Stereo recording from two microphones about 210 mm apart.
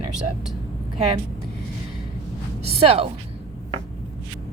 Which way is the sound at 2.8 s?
30° right (ahead or behind).